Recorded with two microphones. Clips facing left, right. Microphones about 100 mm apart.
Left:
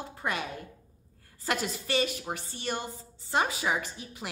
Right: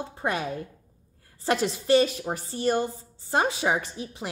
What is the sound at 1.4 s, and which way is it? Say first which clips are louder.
A woman's voice: right 8 dB; 30° right (ahead or behind).